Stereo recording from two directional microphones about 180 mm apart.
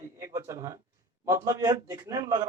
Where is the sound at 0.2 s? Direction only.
15° right (ahead or behind).